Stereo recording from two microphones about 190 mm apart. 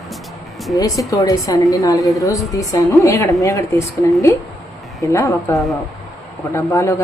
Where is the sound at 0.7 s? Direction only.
15° left (ahead or behind).